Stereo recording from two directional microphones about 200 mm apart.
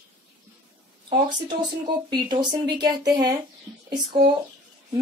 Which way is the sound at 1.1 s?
20° right (ahead or behind).